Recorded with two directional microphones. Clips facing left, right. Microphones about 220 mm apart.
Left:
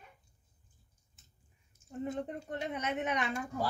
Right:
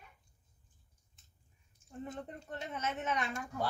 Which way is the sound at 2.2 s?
15° left (ahead or behind).